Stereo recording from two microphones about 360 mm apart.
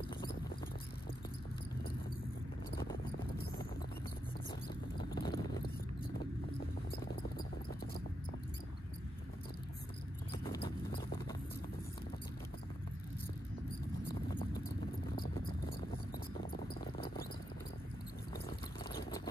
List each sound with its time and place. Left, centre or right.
2.7 s clip-clop: left
4.9 s horse: centre
10.3 s horse: centre